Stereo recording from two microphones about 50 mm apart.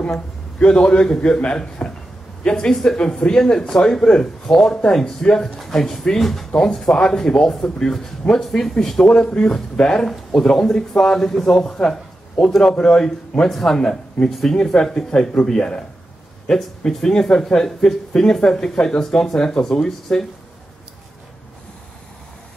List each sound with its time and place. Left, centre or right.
0.6 s a man's voice: centre